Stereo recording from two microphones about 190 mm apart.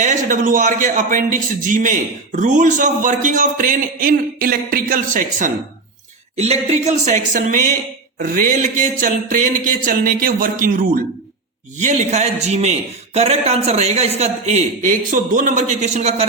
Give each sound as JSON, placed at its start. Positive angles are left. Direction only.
{"t": 0.0, "sound": "a man's voice", "side_deg": -40}